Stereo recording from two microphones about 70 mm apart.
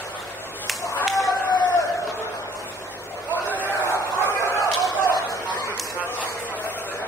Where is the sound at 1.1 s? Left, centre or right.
Left.